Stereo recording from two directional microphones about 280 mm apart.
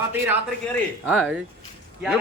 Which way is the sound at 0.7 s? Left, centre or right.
Centre.